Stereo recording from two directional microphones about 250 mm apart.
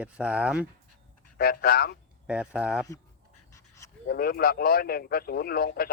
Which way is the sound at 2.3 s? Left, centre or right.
Centre.